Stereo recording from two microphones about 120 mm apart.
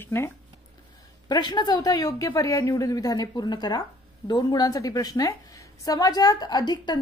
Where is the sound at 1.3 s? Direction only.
35° left (ahead or behind).